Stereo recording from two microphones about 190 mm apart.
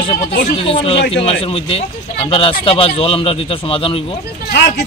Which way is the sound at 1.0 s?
65° left (ahead or behind).